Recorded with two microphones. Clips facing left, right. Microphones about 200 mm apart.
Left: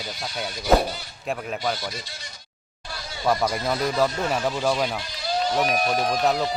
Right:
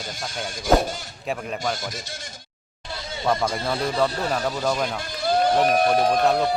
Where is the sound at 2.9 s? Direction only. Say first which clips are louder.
Right 4 dB; 25° right (ahead or behind).